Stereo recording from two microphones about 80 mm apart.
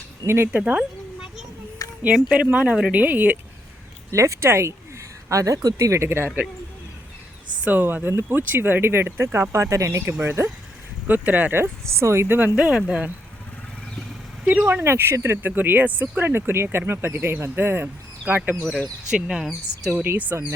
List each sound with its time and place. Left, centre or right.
0.3 s speech: right
0.5 s a sound: centre
1.8 s a sound: left
2.3 s speech: centre
4.1 s speech: right
5.3 s speech: right
7.6 s speech: right
11.1 s speech: right
11.6 s speech: right
12.5 s speech: centre
14.4 s speech: centre
14.7 s speech: right
19.1 s speech: centre
20.0 s speech: right